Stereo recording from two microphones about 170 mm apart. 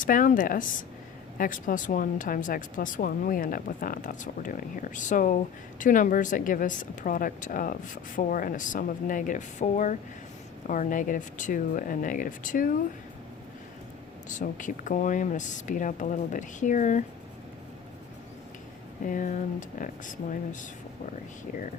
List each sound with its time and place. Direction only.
0.0 s a woman's voice: 55° left (ahead or behind)
14.3 s a woman's voice: 50° left (ahead or behind)
19.0 s a woman's voice: 50° left (ahead or behind)